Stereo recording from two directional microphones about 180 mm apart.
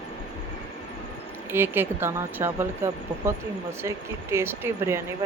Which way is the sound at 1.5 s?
10° right (ahead or behind).